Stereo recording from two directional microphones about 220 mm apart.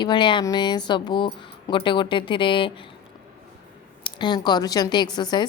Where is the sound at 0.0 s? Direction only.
20° left (ahead or behind).